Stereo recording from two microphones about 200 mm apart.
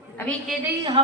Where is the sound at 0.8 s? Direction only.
25° right (ahead or behind).